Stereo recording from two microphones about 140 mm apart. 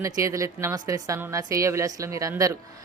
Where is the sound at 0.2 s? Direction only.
20° right (ahead or behind).